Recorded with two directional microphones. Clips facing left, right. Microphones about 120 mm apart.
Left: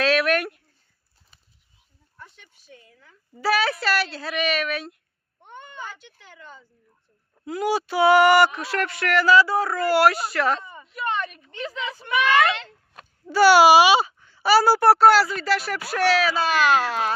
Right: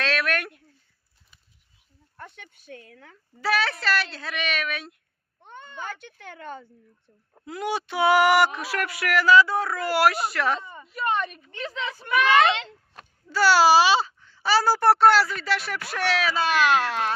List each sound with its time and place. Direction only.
0.0 s a sound: 10° left (ahead or behind)
2.1 s speech: 60° right (ahead or behind)
3.4 s speech: 10° left (ahead or behind)
5.4 s a sound: 15° left (ahead or behind)
5.8 s speech: 55° right (ahead or behind)
7.4 s speech: 5° left (ahead or behind)
12.5 s speech: 25° right (ahead or behind)
13.3 s speech: 15° left (ahead or behind)